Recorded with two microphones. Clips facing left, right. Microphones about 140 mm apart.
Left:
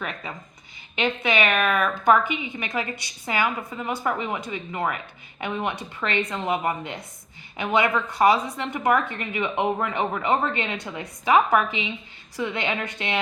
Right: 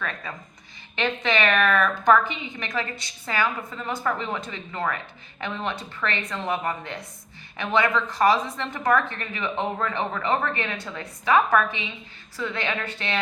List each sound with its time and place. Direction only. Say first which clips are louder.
0.0 s a woman's voice: even; 20° left (ahead or behind)